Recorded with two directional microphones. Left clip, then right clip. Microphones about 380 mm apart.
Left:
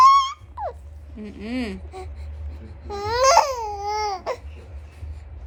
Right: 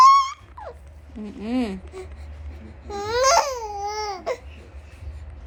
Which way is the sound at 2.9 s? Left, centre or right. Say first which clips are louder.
Left 2 dB; centre.